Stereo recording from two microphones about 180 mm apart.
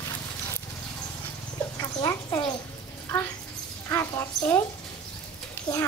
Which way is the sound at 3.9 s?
15° left (ahead or behind).